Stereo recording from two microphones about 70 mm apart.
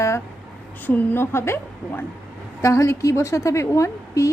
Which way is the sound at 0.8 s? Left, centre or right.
Left.